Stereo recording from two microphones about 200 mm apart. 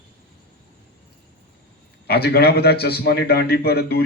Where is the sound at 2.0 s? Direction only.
50° left (ahead or behind).